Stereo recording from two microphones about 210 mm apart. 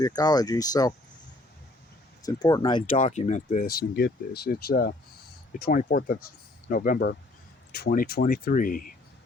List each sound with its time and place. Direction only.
0.0 s speech: 20° left (ahead or behind)
2.2 s speech: 20° left (ahead or behind)
3.0 s speech: 35° left (ahead or behind)